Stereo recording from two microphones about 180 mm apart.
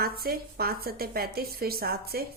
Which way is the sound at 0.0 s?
55° right (ahead or behind).